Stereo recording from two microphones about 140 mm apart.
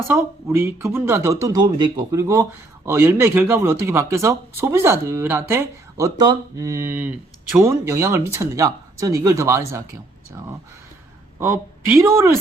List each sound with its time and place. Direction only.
0.1 s speech: 15° right (ahead or behind)
6.1 s speech: 25° right (ahead or behind)
12.1 s speech: 20° right (ahead or behind)